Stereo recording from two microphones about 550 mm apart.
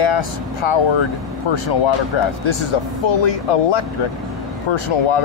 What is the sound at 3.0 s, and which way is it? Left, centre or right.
Speech, left.